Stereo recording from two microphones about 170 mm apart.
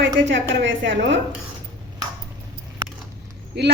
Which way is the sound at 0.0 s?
90° right.